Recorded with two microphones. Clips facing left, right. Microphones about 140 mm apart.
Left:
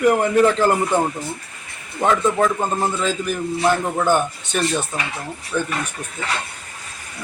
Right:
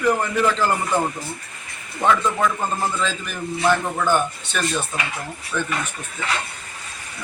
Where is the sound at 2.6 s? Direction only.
20° left (ahead or behind).